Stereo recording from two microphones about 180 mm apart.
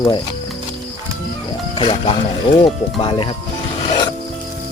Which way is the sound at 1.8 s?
30° left (ahead or behind).